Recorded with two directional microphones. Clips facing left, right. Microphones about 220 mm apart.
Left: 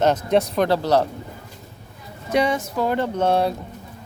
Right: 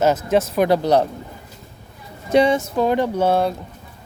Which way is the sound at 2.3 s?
25° right (ahead or behind).